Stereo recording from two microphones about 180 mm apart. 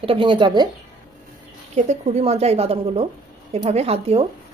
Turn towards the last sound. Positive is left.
turn(degrees=-35)  # may be behind; listen again after turning